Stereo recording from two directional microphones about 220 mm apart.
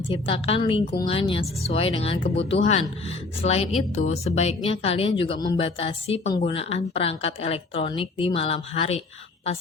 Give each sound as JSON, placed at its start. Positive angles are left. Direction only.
{"t": 0.1, "sound": "speech", "side_deg": 25}